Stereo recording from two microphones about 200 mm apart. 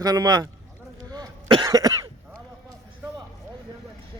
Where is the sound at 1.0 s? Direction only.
20° right (ahead or behind).